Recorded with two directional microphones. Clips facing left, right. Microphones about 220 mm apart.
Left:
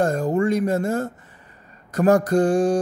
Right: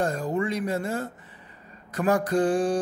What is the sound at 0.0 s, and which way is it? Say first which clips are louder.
Speech: left 6 dB; 45° left (ahead or behind).